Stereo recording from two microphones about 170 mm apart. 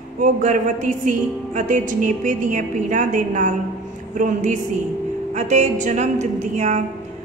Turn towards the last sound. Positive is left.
turn(degrees=-40)  # may be behind; listen again after turning